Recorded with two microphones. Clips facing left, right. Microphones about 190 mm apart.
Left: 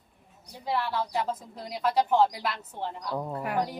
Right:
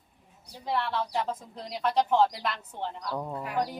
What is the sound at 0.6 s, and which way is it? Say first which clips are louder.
Speech: left 1 dB; 5° left (ahead or behind).